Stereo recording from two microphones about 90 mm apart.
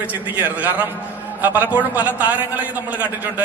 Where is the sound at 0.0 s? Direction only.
20° right (ahead or behind).